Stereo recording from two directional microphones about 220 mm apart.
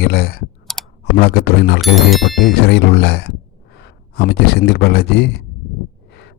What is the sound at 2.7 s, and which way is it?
A man's voice, 50° left (ahead or behind).